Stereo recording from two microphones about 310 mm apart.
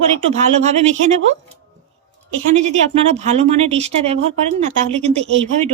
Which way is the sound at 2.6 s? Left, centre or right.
Right.